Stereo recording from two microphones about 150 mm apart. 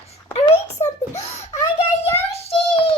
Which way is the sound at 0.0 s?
45° left (ahead or behind).